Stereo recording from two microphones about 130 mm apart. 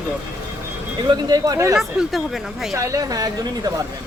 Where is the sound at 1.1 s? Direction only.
30° right (ahead or behind).